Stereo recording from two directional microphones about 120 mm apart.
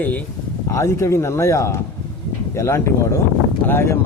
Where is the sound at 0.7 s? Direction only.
25° left (ahead or behind).